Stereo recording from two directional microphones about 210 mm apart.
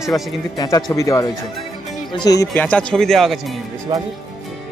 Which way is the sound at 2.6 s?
5° left (ahead or behind).